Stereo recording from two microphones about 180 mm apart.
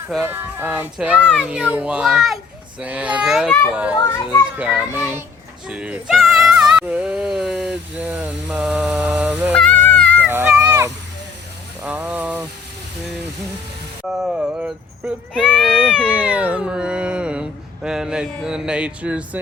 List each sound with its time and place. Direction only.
0.2 s speech: 10° right (ahead or behind)
1.4 s music: 5° right (ahead or behind)
2.8 s speech: 10° right (ahead or behind)
3.9 s a child's voice: 20° left (ahead or behind)
4.5 s speech: 5° right (ahead or behind)
5.6 s music: 5° right (ahead or behind)
9.5 s cat: 5° left (ahead or behind)
10.2 s a sound: 10° right (ahead or behind)
14.2 s speech: 5° right (ahead or behind)
15.4 s music: centre (ahead or behind)